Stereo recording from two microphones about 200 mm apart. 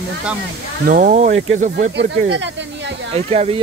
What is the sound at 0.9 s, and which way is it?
Speech, 40° right (ahead or behind).